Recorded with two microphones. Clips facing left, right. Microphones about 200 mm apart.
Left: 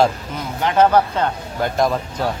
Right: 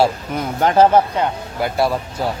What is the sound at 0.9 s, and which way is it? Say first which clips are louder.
Speech: right 1 dB; 10° right (ahead or behind).